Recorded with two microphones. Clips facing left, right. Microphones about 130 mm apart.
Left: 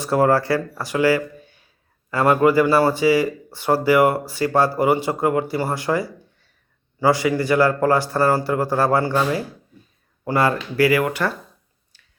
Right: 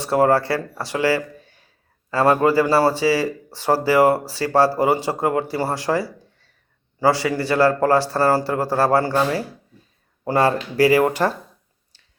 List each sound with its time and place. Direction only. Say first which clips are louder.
0.0 s speech: even; 30° right (ahead or behind)